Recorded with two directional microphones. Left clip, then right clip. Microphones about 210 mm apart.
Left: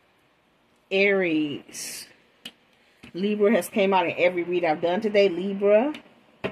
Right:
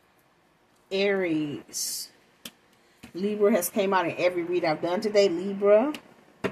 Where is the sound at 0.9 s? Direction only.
45° left (ahead or behind).